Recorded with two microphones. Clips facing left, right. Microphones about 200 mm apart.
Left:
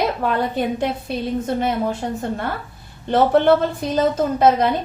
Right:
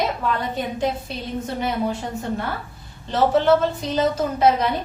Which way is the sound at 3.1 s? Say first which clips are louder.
Left 3 dB; 60° left (ahead or behind).